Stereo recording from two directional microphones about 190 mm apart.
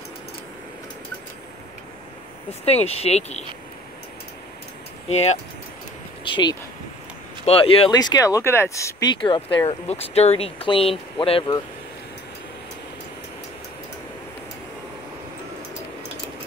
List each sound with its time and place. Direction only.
2.6 s speech: 35° left (ahead or behind)
5.1 s speech: 35° left (ahead or behind)